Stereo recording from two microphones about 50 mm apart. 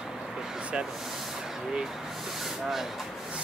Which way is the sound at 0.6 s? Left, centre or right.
Right.